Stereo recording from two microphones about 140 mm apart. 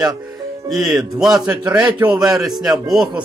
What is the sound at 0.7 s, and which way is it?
A man's voice, centre (ahead or behind).